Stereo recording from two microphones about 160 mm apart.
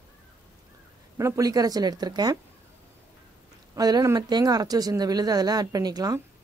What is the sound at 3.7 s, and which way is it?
Speech, 25° right (ahead or behind).